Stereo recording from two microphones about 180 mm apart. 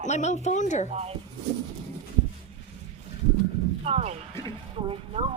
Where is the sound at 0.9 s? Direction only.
35° right (ahead or behind).